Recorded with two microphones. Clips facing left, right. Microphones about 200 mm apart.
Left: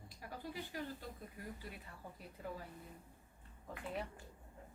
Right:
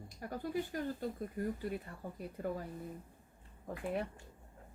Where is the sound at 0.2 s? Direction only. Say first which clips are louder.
Right 9 dB; 50° right (ahead or behind).